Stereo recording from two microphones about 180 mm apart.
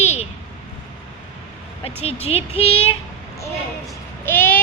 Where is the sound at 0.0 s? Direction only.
35° left (ahead or behind).